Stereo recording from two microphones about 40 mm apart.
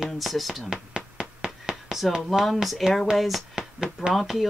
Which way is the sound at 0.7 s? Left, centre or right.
Right.